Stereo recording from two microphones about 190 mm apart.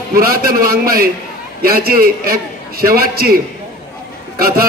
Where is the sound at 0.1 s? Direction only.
50° right (ahead or behind).